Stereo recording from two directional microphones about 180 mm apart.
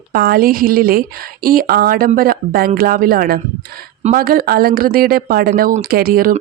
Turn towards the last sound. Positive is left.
turn(degrees=-55)  # may be behind; listen again after turning